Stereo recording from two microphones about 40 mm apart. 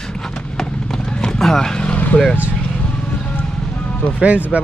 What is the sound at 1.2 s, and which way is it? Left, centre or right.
Speech, centre.